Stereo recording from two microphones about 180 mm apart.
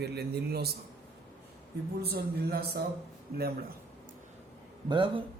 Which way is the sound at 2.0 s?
60° right (ahead or behind).